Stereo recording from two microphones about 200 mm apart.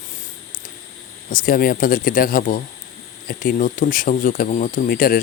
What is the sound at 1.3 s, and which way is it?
Speech, 45° left (ahead or behind).